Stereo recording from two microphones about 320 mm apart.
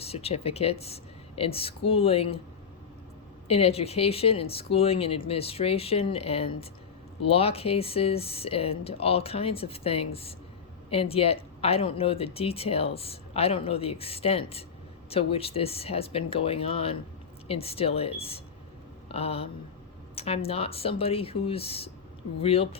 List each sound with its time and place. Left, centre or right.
0.0 s speech: centre
3.5 s speech: centre